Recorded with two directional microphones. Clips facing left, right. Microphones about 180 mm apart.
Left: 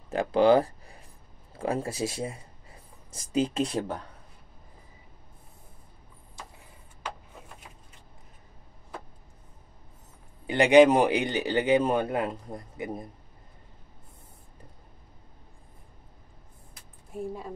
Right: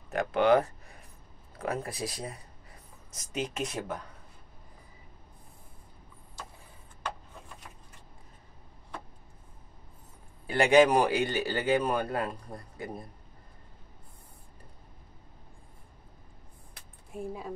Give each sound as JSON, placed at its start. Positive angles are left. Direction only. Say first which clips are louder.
{"t": 0.1, "sound": "a sound", "louder": "left 3 dB", "side_deg": 30}
{"t": 1.6, "sound": "speech", "louder": "left 4 dB", "side_deg": 30}
{"t": 10.4, "sound": "a man's voice", "louder": "left 4 dB", "side_deg": 20}
{"t": 17.1, "sound": "speech", "louder": "left 3 dB", "side_deg": 0}